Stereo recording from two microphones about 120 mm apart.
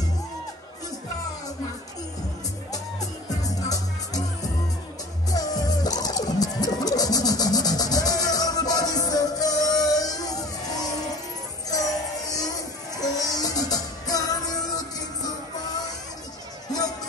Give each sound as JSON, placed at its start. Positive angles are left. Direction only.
{"t": 3.3, "sound": "music", "side_deg": 30}